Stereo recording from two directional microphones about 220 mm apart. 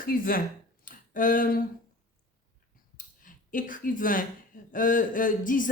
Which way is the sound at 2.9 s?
35° left (ahead or behind).